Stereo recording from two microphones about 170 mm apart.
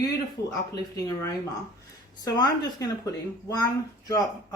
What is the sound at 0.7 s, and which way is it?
A woman's voice, 20° left (ahead or behind).